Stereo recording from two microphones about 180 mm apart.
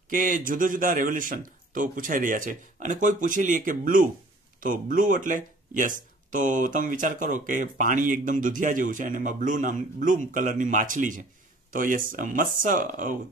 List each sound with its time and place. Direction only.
0.1 s speech: 50° right (ahead or behind)